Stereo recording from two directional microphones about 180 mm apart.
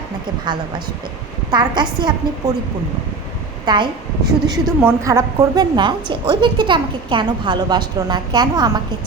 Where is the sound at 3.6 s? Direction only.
25° right (ahead or behind).